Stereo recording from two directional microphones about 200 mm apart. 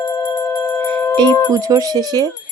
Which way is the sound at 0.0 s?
20° left (ahead or behind).